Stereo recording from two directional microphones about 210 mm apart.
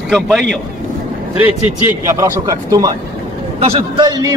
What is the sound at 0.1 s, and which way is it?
Speech, centre (ahead or behind).